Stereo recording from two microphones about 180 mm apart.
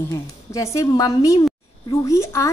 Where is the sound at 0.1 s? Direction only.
15° left (ahead or behind).